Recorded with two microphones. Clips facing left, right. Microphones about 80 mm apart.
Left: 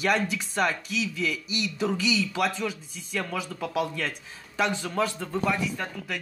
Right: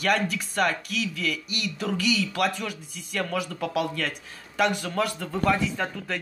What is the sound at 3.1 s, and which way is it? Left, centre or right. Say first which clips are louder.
Speech: right 2 dB; centre.